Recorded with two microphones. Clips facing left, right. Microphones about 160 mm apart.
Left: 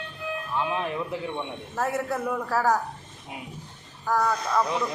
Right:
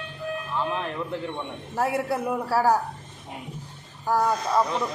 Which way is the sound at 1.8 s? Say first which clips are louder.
Right 2 dB; 10° right (ahead or behind).